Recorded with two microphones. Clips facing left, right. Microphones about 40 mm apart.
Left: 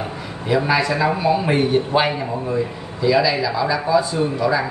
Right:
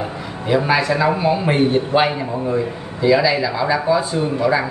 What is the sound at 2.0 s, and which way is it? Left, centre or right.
Speech, right.